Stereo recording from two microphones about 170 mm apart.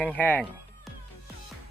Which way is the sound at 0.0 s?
10° left (ahead or behind).